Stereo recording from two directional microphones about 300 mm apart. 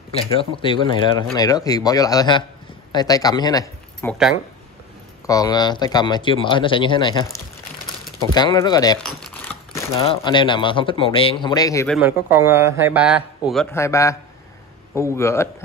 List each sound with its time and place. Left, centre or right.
0.1 s speech: centre
5.2 s speech: centre
12.0 s speech: centre